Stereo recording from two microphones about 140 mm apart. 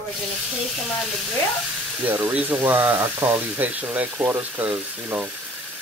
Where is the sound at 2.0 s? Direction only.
15° right (ahead or behind).